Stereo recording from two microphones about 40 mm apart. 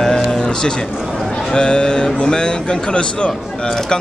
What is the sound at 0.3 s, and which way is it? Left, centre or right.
Music, centre.